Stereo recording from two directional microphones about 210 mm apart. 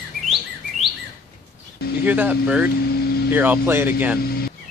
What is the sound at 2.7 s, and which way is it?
Vehicle, 50° left (ahead or behind).